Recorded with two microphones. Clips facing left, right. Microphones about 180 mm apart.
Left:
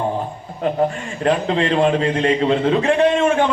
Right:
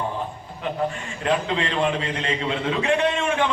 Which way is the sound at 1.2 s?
40° left (ahead or behind).